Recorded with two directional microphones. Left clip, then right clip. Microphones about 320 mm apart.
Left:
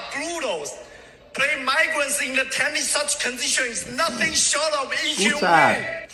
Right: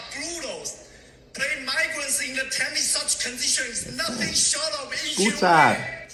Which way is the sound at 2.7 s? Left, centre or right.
Left.